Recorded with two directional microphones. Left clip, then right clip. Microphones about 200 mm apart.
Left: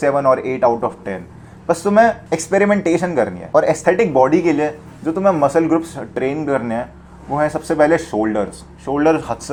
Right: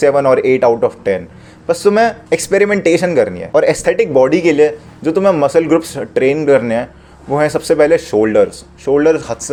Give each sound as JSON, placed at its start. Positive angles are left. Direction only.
{"t": 0.0, "sound": "speech", "side_deg": -55}